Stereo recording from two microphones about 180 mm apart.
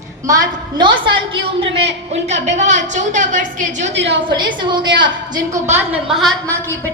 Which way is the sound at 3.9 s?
80° right.